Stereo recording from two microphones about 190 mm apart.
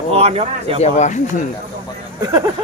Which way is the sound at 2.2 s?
20° right (ahead or behind).